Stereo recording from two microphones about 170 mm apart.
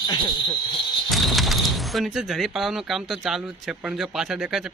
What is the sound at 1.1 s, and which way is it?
Speech, centre (ahead or behind).